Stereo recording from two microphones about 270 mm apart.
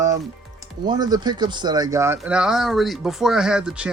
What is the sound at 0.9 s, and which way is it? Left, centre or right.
Speech, centre.